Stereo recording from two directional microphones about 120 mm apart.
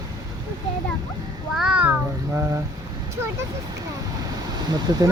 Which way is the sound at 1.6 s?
10° right (ahead or behind).